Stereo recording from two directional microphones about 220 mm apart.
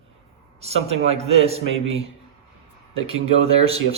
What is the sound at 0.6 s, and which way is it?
A man's voice, 30° right (ahead or behind).